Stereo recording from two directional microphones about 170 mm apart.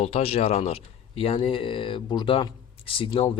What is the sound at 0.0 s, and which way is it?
Speech, 35° left (ahead or behind).